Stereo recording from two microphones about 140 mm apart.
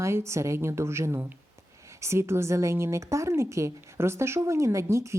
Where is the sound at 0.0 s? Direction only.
20° right (ahead or behind).